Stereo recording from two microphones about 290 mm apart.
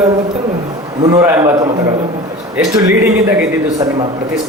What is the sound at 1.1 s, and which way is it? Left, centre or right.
Speech, centre.